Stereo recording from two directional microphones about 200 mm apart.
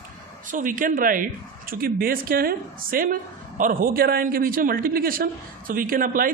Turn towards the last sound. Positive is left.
turn(degrees=-45)  # may be behind; listen again after turning